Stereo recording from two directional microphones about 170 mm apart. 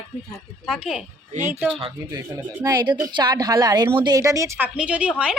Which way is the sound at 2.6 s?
25° right (ahead or behind).